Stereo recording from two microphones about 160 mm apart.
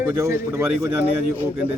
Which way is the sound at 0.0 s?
15° right (ahead or behind).